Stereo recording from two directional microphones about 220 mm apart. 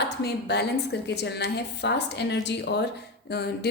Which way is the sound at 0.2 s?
50° left (ahead or behind).